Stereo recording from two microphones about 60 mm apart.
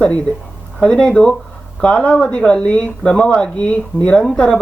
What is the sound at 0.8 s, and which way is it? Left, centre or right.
Speech, centre.